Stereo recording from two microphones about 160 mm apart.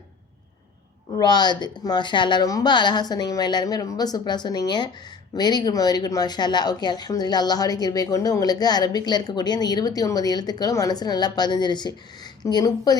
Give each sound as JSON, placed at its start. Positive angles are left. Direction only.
{"t": 1.1, "sound": "speech", "side_deg": 25}